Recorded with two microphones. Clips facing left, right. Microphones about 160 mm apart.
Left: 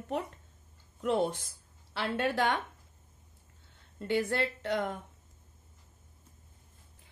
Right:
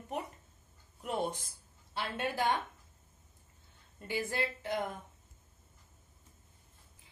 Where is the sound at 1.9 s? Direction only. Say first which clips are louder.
Left 5 dB; 80° left.